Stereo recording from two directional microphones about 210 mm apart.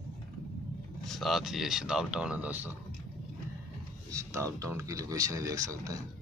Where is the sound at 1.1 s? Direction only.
Centre (ahead or behind).